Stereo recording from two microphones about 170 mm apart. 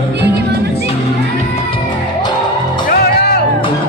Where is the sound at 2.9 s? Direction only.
65° left (ahead or behind).